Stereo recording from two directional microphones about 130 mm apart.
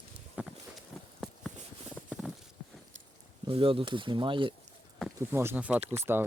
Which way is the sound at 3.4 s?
45° right (ahead or behind).